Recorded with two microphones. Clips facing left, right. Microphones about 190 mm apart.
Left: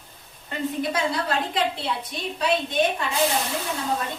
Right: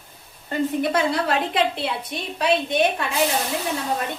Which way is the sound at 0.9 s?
65° right (ahead or behind).